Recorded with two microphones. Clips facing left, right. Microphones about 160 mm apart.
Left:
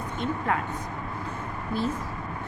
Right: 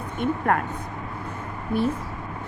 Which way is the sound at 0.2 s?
55° right (ahead or behind).